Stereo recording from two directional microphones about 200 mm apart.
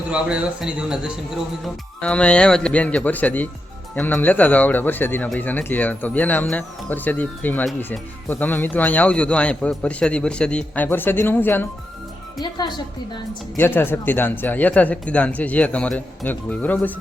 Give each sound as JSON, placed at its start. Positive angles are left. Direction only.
{"t": 0.1, "sound": "speech", "side_deg": -5}
{"t": 12.4, "sound": "a woman's voice", "side_deg": 20}
{"t": 13.6, "sound": "speech", "side_deg": 10}